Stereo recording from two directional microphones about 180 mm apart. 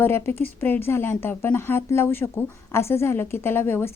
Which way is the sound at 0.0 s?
10° left (ahead or behind).